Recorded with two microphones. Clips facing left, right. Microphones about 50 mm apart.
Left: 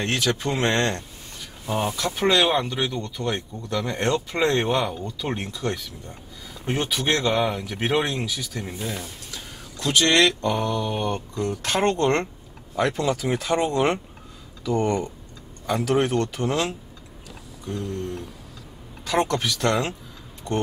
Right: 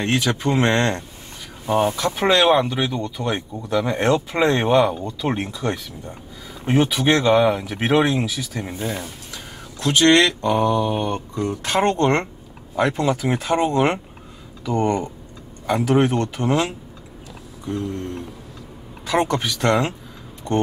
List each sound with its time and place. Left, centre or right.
0.0 s speech: centre
2.0 s speech: centre; by 20.6 s right